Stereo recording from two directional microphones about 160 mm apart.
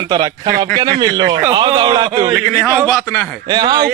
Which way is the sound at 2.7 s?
Centre (ahead or behind).